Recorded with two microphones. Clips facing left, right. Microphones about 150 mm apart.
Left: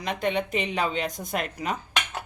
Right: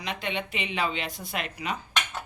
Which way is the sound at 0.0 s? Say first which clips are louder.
Left 6 dB; 45° left (ahead or behind).